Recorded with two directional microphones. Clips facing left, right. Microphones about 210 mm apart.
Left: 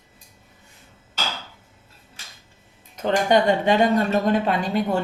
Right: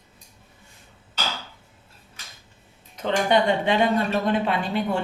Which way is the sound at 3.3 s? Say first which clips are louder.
Left 3 dB; 40° left (ahead or behind).